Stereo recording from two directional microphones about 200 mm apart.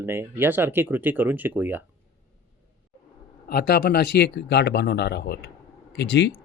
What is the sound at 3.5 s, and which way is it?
Speech, 50° left (ahead or behind).